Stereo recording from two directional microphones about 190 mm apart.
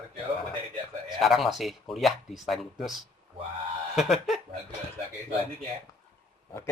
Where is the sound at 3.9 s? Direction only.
Centre (ahead or behind).